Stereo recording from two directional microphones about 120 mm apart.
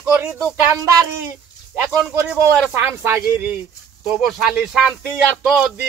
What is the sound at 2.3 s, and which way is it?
Speech, 20° right (ahead or behind).